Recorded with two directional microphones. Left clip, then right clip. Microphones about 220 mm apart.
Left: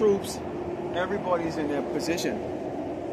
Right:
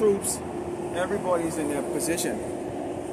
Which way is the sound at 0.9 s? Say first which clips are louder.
Right 1 dB; centre (ahead or behind).